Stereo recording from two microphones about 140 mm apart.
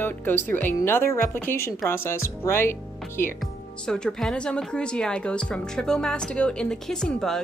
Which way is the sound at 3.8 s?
5° left (ahead or behind).